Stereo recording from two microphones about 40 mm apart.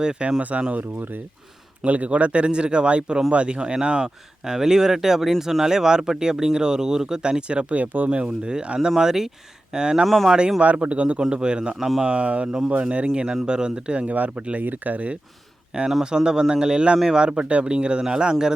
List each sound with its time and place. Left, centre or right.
0.0 s speech: right
1.8 s speech: right
9.0 s speech: centre
10.6 s a man's voice: right
12.5 s speech: centre
12.7 s a man's voice: right
14.1 s a man's voice: right
14.3 s speech: right
14.6 s a man's voice: right
15.7 s speech: right